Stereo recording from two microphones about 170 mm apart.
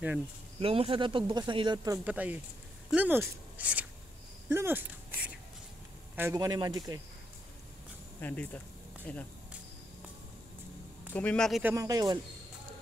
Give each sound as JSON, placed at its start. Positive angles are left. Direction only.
{"t": 0.6, "sound": "speech", "side_deg": -35}
{"t": 2.0, "sound": "speech", "side_deg": -10}
{"t": 8.2, "sound": "speech", "side_deg": 10}
{"t": 11.1, "sound": "speech", "side_deg": 5}
{"t": 11.6, "sound": "speech", "side_deg": -20}